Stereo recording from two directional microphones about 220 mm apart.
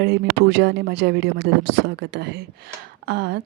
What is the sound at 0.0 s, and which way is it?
Speech, 50° right (ahead or behind).